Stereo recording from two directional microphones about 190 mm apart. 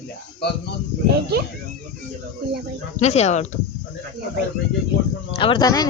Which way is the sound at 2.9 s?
35° left (ahead or behind).